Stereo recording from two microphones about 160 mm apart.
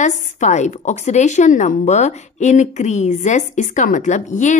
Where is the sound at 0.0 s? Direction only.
50° left (ahead or behind).